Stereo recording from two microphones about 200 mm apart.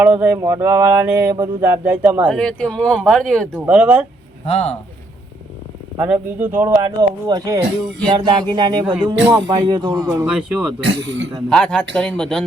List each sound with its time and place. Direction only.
0.0 s a sound: 10° right (ahead or behind)
2.3 s speech: 5° left (ahead or behind)
3.5 s a sound: 5° right (ahead or behind)
4.4 s a man's voice: 30° left (ahead or behind)
6.0 s a sound: 10° right (ahead or behind)
6.8 s speech: 20° right (ahead or behind)
10.2 s speech: 5° right (ahead or behind)
10.8 s a man's voice: 65° right (ahead or behind)
11.4 s speech: 5° left (ahead or behind)